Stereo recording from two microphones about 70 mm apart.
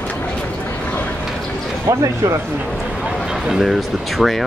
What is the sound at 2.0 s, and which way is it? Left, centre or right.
Speech, right.